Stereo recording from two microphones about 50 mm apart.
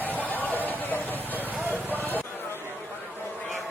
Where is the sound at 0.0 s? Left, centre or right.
Left.